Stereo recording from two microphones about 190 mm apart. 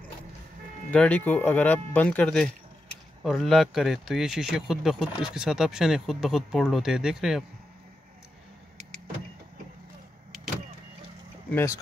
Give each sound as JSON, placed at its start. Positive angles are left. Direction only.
{"t": 0.9, "sound": "speech", "side_deg": 5}
{"t": 8.7, "sound": "vehicle", "side_deg": -35}
{"t": 11.5, "sound": "speech", "side_deg": 15}